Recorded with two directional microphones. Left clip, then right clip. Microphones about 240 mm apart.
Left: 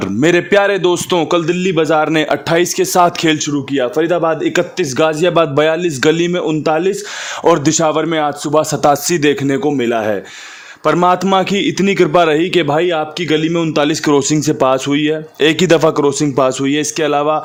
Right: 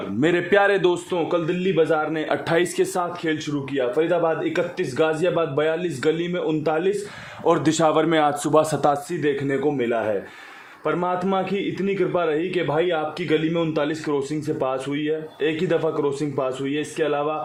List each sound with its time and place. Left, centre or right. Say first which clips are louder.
0.2 s a man's voice: left 7 dB; left
1.1 s a man's voice: left 9 dB; left
2.3 s a man's voice: left 7 dB; left
3.0 s a man's voice: left 13 dB; left
7.4 s a man's voice: left 7 dB; left
9.0 s a man's voice: left 10 dB; left